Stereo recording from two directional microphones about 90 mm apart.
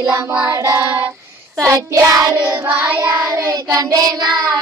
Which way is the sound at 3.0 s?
40° right (ahead or behind).